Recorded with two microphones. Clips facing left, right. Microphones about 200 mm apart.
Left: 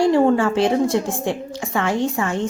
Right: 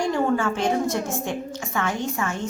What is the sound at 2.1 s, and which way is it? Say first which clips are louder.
Speech: left 5 dB; 30° left (ahead or behind).